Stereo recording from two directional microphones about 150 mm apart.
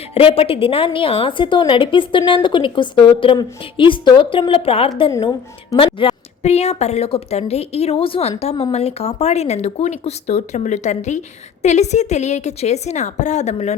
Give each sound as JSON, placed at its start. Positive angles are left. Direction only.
{"t": 0.1, "sound": "a woman's voice", "side_deg": 40}